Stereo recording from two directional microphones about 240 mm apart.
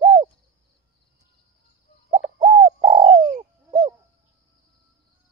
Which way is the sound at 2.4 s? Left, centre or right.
Right.